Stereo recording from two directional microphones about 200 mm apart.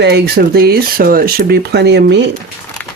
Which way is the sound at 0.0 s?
55° right (ahead or behind).